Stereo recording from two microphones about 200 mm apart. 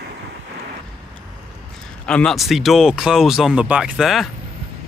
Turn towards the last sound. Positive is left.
turn(degrees=0)  # may be behind; listen again after turning